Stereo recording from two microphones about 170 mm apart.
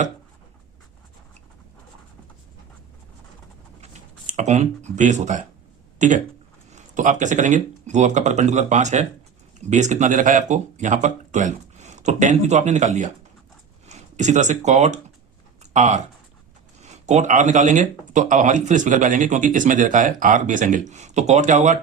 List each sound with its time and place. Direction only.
3.8 s a sound: 45° right (ahead or behind)
6.0 s speech: 45° right (ahead or behind)
17.1 s speech: 45° right (ahead or behind)